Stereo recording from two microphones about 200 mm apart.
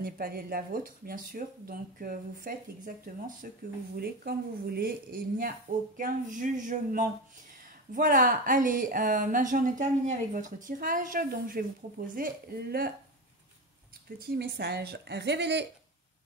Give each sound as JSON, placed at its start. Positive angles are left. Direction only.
{"t": 0.0, "sound": "a woman's voice", "side_deg": -50}
{"t": 14.2, "sound": "a woman's voice", "side_deg": -50}